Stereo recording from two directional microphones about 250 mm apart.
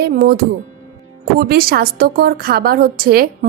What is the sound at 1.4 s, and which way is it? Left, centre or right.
A woman's voice, right.